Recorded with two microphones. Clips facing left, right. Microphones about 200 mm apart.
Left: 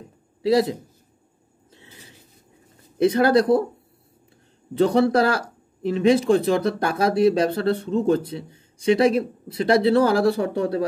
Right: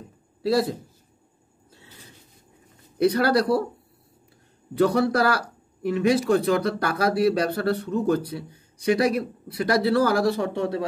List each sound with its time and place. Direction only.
1.7 s a sound: 20° left (ahead or behind)
3.0 s speech: 20° left (ahead or behind)
4.7 s speech: 25° left (ahead or behind)